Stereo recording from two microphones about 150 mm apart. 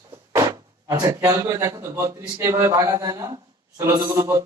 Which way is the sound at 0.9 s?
20° right (ahead or behind).